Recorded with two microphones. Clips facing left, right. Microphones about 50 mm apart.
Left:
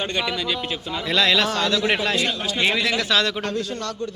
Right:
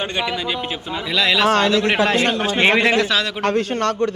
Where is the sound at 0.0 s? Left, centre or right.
Centre.